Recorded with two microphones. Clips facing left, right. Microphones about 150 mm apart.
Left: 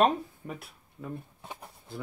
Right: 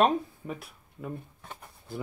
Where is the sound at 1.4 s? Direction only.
10° left (ahead or behind).